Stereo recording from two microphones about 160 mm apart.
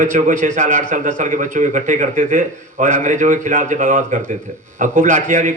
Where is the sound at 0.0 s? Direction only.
55° right (ahead or behind).